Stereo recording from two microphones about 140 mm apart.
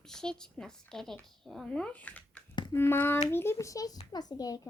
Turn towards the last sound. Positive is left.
turn(degrees=25)  # may be behind; listen again after turning